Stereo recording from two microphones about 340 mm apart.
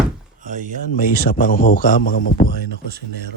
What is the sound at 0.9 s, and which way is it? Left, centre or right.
A man's voice, left.